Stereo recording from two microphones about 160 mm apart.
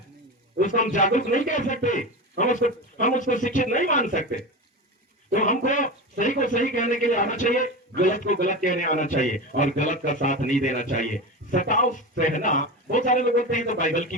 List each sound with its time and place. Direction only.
0.6 s a man's voice: 55° left (ahead or behind)